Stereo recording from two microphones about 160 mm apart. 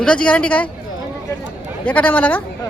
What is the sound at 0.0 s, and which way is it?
Speech, 5° left (ahead or behind).